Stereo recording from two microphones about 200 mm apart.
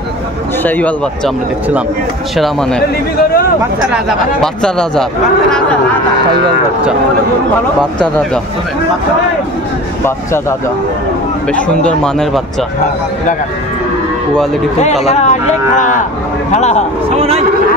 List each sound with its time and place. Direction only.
0.7 s speech: 5° left (ahead or behind)
2.3 s speech: centre (ahead or behind)
3.9 s speech: 5° left (ahead or behind)
14.8 s a man's voice: 35° left (ahead or behind)